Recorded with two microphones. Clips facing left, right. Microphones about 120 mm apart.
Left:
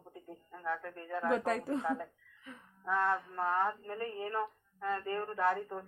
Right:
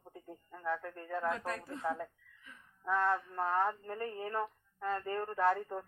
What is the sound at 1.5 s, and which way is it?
Speech, 90° left.